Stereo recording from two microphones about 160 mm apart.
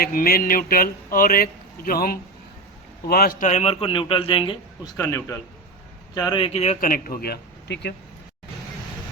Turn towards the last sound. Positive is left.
turn(degrees=90)